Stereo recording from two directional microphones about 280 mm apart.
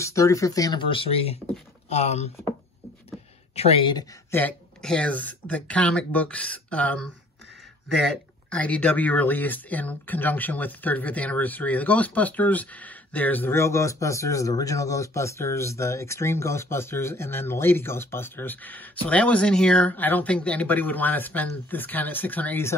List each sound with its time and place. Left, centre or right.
0.0 s speech: centre
3.5 s speech: left